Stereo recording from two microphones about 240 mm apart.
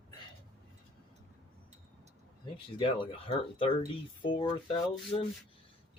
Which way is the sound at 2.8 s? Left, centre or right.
Left.